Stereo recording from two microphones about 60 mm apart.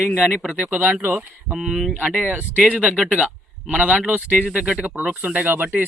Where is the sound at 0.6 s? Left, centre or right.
Right.